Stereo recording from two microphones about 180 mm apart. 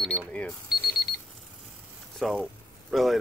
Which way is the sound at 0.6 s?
60° left (ahead or behind).